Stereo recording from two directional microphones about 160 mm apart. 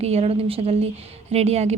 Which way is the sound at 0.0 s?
40° right (ahead or behind).